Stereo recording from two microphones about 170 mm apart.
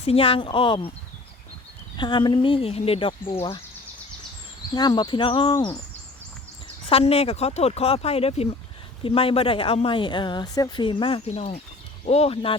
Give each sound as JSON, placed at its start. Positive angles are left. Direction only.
{"t": 0.0, "sound": "speech", "side_deg": 35}
{"t": 2.0, "sound": "speech", "side_deg": 25}
{"t": 4.7, "sound": "speech", "side_deg": 25}
{"t": 6.8, "sound": "speech", "side_deg": 35}